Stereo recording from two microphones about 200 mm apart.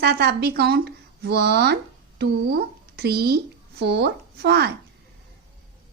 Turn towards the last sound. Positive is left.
turn(degrees=-55)  # may be behind; listen again after turning